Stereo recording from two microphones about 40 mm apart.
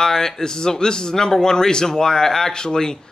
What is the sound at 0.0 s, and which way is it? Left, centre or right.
Speech, centre.